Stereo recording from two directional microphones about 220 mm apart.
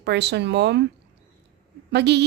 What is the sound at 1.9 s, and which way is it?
Speech, 50° right (ahead or behind).